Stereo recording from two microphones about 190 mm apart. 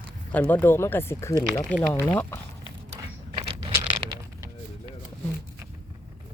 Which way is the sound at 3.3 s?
25° right (ahead or behind).